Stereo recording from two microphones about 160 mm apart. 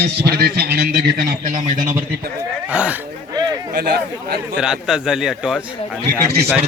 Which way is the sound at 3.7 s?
85° right.